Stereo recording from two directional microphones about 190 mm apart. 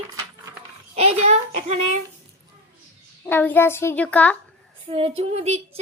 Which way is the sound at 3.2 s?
10° left (ahead or behind).